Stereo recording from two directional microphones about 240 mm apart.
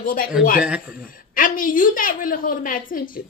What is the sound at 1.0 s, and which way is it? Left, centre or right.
A woman's voice, left.